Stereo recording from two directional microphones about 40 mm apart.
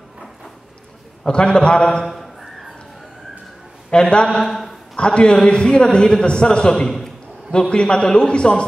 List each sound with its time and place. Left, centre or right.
1.2 s a man's voice: left
3.9 s a man's voice: left
4.4 s a sound: centre
4.9 s a man's voice: left
7.5 s a man's voice: left